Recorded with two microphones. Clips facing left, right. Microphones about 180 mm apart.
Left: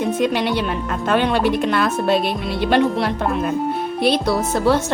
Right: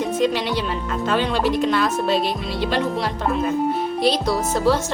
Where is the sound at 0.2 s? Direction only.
55° left (ahead or behind).